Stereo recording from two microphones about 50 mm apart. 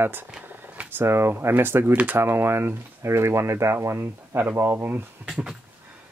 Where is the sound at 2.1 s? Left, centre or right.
Right.